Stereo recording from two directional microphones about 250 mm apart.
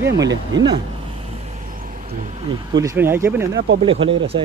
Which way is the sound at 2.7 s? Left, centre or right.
Centre.